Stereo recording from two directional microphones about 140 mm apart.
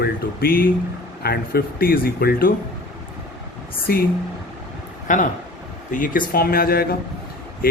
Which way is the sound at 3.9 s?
90° left.